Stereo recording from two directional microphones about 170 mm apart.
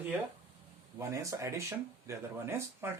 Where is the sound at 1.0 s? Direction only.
20° right (ahead or behind).